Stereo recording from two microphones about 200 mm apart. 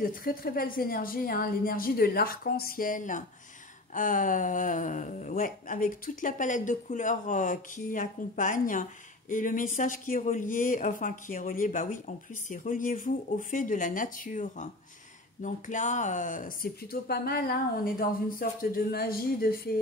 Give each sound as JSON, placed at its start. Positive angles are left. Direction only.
{"t": 0.0, "sound": "speech", "side_deg": 45}